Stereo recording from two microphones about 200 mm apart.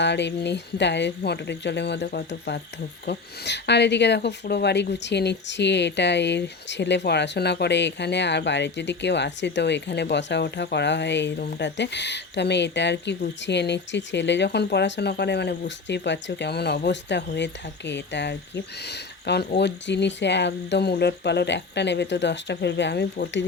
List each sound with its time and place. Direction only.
0.0 s speech: 60° left (ahead or behind)